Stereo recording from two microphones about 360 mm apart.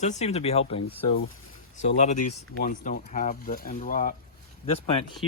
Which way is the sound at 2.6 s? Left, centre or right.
Left.